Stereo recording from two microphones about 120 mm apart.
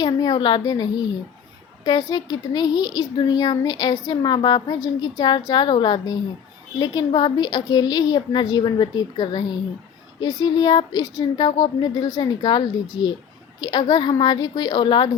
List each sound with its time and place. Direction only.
0.0 s a woman's voice: 35° left (ahead or behind)